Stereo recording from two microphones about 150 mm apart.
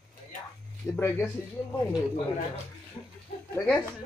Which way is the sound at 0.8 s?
15° left (ahead or behind).